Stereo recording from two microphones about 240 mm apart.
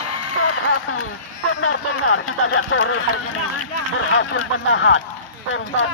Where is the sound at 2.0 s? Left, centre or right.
Left.